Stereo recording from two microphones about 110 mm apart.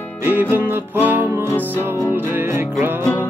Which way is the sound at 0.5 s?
20° right (ahead or behind).